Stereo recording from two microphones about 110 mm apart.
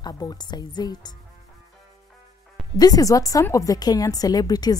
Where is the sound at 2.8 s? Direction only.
35° left (ahead or behind).